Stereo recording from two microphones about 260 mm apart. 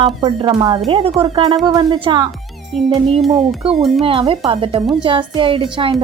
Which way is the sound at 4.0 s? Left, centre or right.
Right.